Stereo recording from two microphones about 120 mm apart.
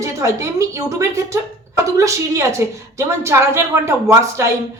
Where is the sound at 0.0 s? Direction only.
25° right (ahead or behind).